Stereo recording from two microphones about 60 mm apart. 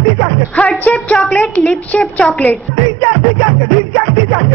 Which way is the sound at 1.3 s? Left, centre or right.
Left.